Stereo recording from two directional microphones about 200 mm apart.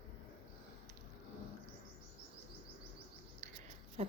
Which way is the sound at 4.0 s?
30° right (ahead or behind).